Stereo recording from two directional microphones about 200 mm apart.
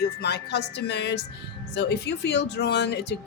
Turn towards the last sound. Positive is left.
turn(degrees=55)  # may be behind; listen again after turning